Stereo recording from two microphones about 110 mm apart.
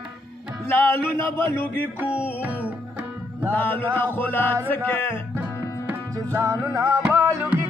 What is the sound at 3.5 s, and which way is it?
Music, 20° left (ahead or behind).